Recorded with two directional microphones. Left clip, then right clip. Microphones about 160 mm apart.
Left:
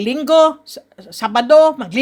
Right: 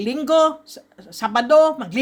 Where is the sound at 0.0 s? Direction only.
25° left (ahead or behind).